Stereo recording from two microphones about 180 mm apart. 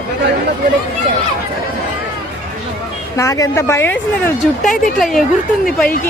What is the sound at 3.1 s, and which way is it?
Speech, 15° left (ahead or behind).